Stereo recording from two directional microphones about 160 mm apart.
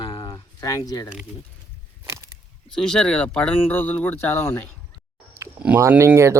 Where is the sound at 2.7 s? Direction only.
5° left (ahead or behind).